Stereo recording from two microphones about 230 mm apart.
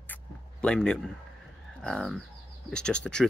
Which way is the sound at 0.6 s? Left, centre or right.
Centre.